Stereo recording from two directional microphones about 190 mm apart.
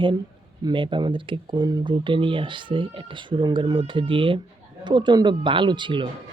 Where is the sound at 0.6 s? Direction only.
25° right (ahead or behind).